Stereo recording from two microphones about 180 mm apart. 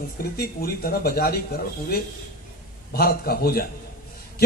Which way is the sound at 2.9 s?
55° left (ahead or behind).